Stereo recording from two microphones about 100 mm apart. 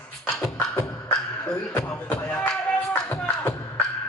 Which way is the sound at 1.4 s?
15° left (ahead or behind).